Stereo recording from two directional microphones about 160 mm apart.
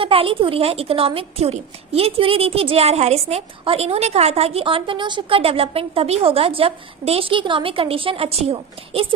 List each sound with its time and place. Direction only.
0.0 s speech: 35° right (ahead or behind)